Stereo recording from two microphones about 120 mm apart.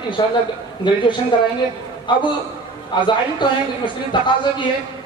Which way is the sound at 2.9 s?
40° left (ahead or behind).